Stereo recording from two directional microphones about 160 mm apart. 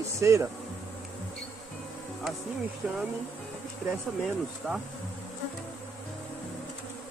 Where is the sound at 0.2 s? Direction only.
20° right (ahead or behind).